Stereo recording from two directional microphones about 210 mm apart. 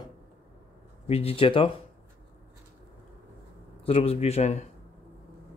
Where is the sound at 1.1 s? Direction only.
30° left (ahead or behind).